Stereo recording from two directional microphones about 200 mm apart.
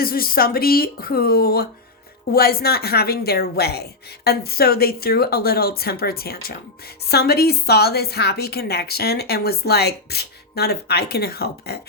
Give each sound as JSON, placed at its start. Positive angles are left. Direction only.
{"t": 0.0, "sound": "a woman's voice", "side_deg": 45}